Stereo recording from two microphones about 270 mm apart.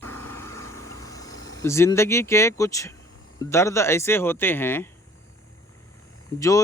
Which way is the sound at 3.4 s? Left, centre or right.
Centre.